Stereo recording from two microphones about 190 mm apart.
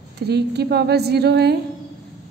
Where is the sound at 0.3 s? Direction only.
60° right (ahead or behind).